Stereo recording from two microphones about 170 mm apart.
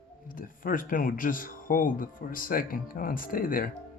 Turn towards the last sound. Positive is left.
turn(degrees=55)  # may be behind; listen again after turning